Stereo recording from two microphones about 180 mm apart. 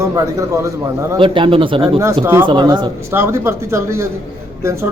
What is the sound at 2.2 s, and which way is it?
Speech, 15° right (ahead or behind).